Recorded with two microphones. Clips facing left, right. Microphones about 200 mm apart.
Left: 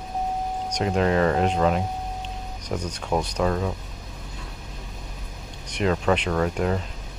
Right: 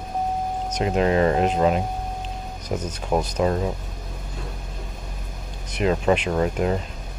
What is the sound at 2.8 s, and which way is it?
Speech, 10° right (ahead or behind).